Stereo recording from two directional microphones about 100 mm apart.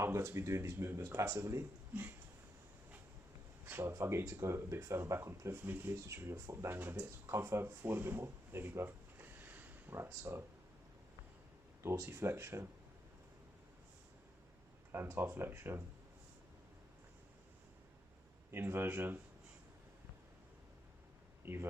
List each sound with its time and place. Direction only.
0.0 s speech: 25° right (ahead or behind)
3.7 s speech: 25° right (ahead or behind)
11.8 s speech: 25° right (ahead or behind)
14.9 s speech: 25° right (ahead or behind)
18.5 s speech: 25° right (ahead or behind)
21.4 s speech: 25° right (ahead or behind)